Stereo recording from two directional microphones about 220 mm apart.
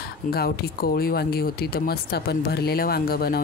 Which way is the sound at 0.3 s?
45° left (ahead or behind).